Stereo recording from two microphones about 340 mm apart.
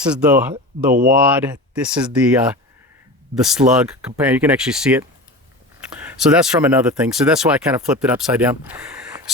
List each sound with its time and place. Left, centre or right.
0.0 s speech: centre